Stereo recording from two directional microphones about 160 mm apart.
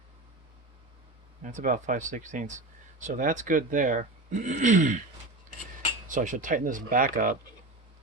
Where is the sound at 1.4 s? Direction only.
55° right (ahead or behind).